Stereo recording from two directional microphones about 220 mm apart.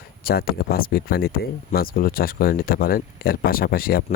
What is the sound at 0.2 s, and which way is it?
Speech, 45° left (ahead or behind).